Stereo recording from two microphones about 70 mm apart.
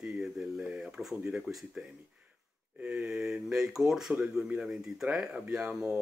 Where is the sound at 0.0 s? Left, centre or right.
Centre.